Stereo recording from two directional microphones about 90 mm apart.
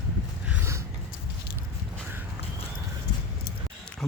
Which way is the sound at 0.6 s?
30° right (ahead or behind).